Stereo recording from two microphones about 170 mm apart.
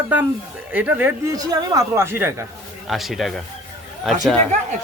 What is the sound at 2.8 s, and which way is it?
A man's voice, centre (ahead or behind).